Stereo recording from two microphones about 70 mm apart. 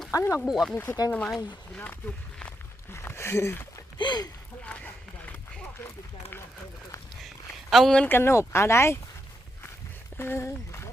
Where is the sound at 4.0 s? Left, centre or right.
Left.